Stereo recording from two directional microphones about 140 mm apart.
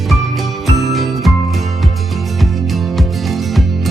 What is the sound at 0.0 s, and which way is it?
Music, centre (ahead or behind).